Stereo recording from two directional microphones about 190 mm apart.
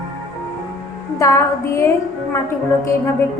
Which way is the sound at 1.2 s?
15° left (ahead or behind).